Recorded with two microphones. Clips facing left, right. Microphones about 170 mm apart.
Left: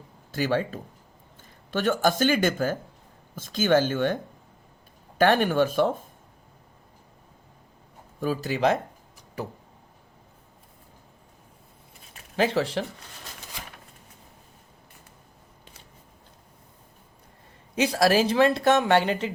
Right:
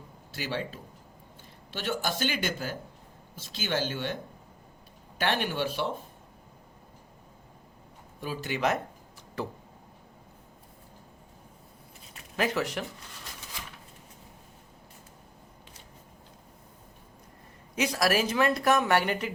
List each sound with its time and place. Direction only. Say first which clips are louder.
0.3 s a man's voice: left 9 dB; 50° left (ahead or behind)
8.2 s speech: left 6 dB; 40° left (ahead or behind)
12.4 s a woman's voice: left 5 dB; 30° left (ahead or behind)
17.7 s a woman's voice: left 5 dB; 30° left (ahead or behind)